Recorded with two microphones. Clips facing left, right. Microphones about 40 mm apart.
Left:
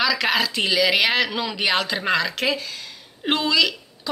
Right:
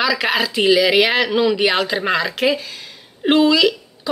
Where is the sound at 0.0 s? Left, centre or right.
Centre.